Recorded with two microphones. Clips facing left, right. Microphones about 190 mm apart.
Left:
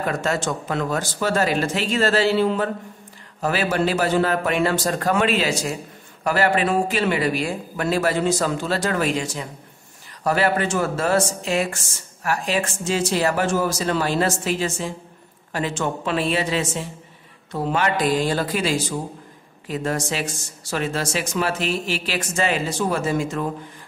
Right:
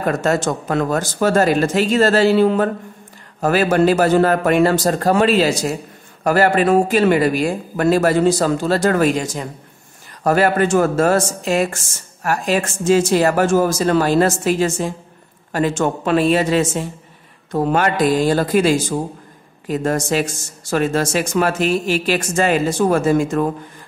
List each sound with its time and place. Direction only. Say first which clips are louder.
0.0 s speech: right 5 dB; 45° right (ahead or behind)